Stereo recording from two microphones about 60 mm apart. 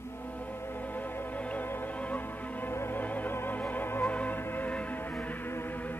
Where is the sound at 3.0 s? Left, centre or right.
Left.